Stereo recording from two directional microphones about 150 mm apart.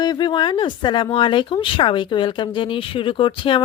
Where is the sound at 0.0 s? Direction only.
30° left (ahead or behind).